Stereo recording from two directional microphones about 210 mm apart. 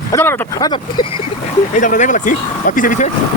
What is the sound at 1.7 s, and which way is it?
Speech, 35° left (ahead or behind).